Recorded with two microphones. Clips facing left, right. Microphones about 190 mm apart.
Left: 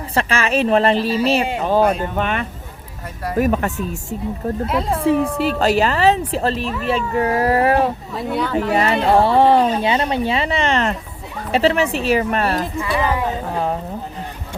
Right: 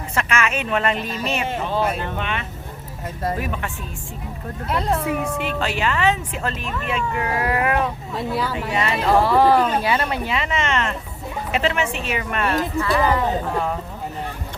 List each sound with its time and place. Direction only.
0.1 s speech: 30° left (ahead or behind)
1.6 s speech: 45° left (ahead or behind)
4.7 s speech: centre (ahead or behind)
5.0 s speech: 35° left (ahead or behind)
8.1 s speech: centre (ahead or behind)
8.7 s speech: 35° left (ahead or behind)
12.8 s speech: 15° left (ahead or behind)